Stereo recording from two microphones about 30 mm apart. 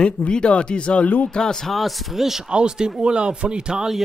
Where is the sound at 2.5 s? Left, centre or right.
Right.